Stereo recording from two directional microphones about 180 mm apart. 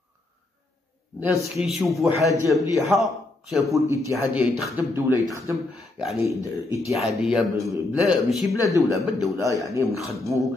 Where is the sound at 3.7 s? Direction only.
15° right (ahead or behind).